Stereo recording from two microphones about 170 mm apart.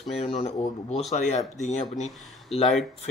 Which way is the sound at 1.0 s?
45° left (ahead or behind).